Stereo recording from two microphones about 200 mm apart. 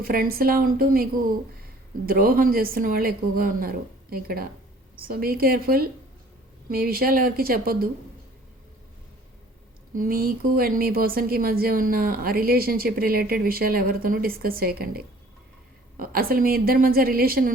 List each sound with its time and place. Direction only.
0.0 s a woman's voice: 45° right (ahead or behind)
2.0 s a woman's voice: 45° right (ahead or behind)
9.9 s a woman's voice: 45° right (ahead or behind)